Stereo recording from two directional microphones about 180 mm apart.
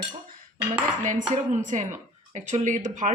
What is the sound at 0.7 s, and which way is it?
Speech, 45° right (ahead or behind).